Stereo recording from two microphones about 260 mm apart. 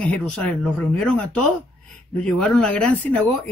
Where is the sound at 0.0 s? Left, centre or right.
Centre.